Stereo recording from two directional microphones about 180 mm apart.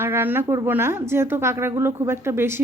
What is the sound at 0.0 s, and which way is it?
A woman's voice, 10° right (ahead or behind).